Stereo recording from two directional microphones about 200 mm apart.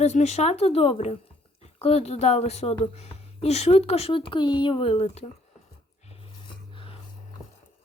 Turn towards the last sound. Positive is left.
turn(degrees=25)  # may be behind; listen again after turning